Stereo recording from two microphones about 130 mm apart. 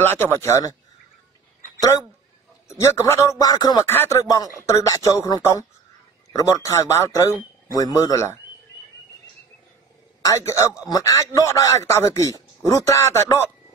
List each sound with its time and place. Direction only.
0.0 s speech: 15° left (ahead or behind)
1.8 s speech: 30° left (ahead or behind)
3.8 s speech: 15° left (ahead or behind)
10.2 s speech: 25° left (ahead or behind)